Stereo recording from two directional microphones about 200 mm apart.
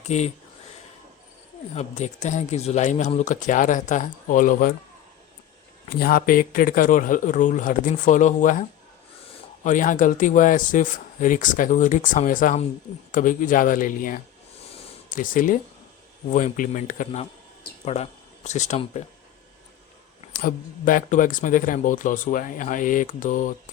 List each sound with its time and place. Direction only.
0.0 s speech: 35° left (ahead or behind)
1.7 s speech: 35° left (ahead or behind)
6.0 s a man's voice: 45° left (ahead or behind)
9.6 s a man's voice: 40° left (ahead or behind)
20.3 s speech: 45° left (ahead or behind)